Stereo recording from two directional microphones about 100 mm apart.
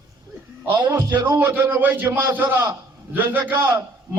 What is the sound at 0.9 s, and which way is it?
A man's voice, 20° right (ahead or behind).